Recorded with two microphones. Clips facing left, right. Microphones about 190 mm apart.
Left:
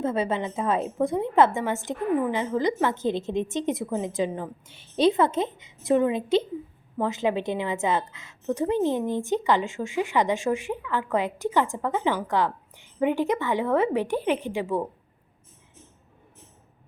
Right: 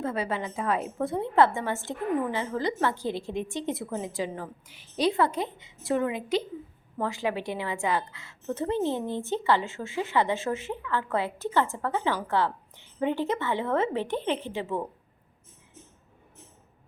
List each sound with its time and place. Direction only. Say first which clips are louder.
0.0 s a woman's voice: left 4 dB; 25° left (ahead or behind)